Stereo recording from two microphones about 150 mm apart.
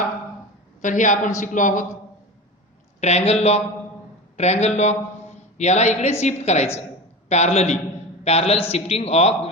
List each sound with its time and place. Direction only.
0.8 s a woman's voice: 60° left (ahead or behind)
3.0 s a woman's voice: 45° left (ahead or behind)